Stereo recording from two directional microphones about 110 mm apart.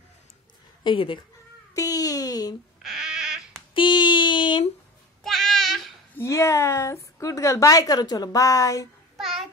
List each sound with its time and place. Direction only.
0.8 s speech: 50° left (ahead or behind)
1.7 s a sound: 35° left (ahead or behind)
2.8 s frog: centre (ahead or behind)
3.7 s a sound: 45° left (ahead or behind)
5.2 s child singing: centre (ahead or behind)
6.1 s a woman's voice: 25° left (ahead or behind)
9.2 s child singing: centre (ahead or behind)